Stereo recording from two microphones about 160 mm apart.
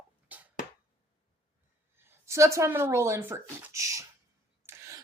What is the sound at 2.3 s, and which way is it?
Speech, 20° right (ahead or behind).